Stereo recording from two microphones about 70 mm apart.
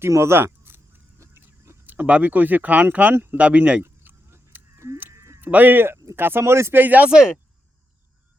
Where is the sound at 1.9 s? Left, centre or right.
Right.